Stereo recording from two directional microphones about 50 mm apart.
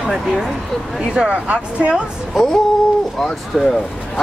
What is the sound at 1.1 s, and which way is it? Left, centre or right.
Speech, right.